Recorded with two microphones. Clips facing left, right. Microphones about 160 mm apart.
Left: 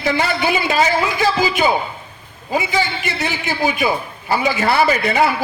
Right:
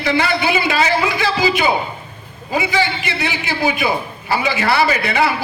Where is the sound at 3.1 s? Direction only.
45° left (ahead or behind).